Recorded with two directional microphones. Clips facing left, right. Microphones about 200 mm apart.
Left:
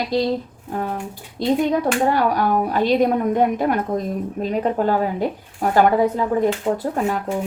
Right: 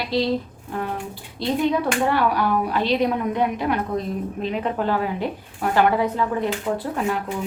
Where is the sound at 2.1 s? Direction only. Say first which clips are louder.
Left 2 dB; 45° left (ahead or behind).